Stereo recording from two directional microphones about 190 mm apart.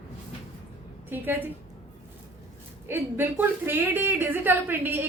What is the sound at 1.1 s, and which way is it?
Speech, 10° right (ahead or behind).